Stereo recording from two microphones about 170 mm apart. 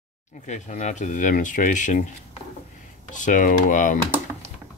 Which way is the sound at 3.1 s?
45° left (ahead or behind).